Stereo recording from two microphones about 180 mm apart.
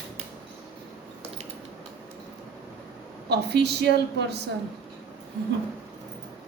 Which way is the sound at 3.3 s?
65° right (ahead or behind).